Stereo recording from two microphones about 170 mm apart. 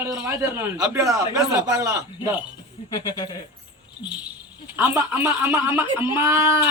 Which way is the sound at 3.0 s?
25° left (ahead or behind).